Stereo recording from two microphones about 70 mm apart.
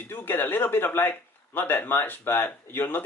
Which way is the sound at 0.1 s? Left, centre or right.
Left.